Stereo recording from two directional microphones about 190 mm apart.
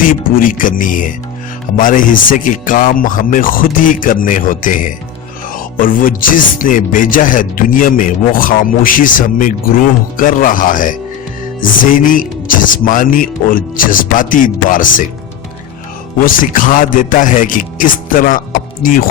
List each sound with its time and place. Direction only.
0.0 s speech: 45° left (ahead or behind)
16.2 s speech: 45° left (ahead or behind)